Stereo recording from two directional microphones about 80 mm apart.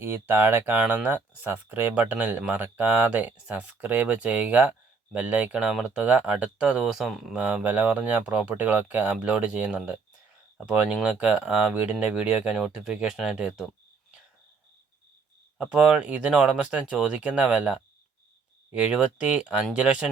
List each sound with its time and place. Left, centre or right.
0.0 s speech: right; by 7.3 s centre
7.3 s speech: centre
15.5 s speech: centre